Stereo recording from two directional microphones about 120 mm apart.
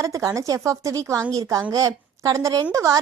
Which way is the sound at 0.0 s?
25° right (ahead or behind).